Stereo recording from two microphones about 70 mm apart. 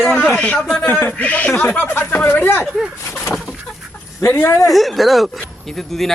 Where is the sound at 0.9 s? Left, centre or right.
Left.